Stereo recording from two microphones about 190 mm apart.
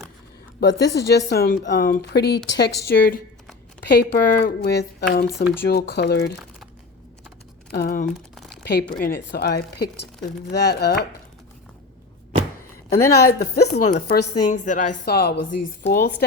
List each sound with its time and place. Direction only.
0.6 s speech: 65° left (ahead or behind)
7.7 s speech: 50° left (ahead or behind)
12.9 s speech: 55° left (ahead or behind)
14.4 s speech: 40° left (ahead or behind)